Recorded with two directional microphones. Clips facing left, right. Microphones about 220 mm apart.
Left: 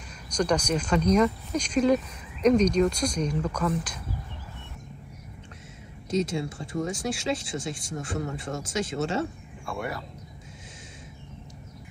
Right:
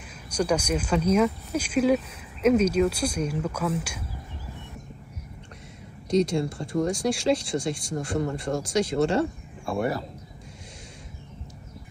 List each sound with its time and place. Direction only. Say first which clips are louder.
0.3 s speech: even; 10° right (ahead or behind)
6.0 s speech: right 4 dB; 5° left (ahead or behind)
9.7 s speech: right 7 dB; 30° right (ahead or behind)